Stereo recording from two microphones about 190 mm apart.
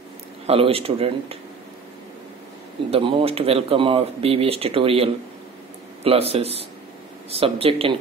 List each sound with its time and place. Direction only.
0.5 s speech: 30° right (ahead or behind)
2.9 s speech: 25° right (ahead or behind)